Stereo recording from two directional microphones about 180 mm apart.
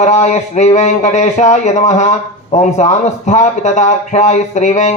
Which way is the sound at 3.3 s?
40° left (ahead or behind).